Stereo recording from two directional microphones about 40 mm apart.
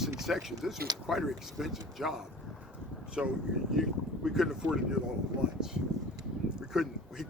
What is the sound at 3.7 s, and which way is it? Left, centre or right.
Speech, centre.